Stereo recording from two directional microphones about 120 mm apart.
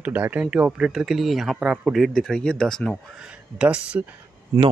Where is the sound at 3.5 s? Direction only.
10° right (ahead or behind).